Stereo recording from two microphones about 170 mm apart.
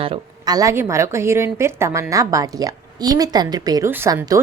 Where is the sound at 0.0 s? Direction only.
25° right (ahead or behind).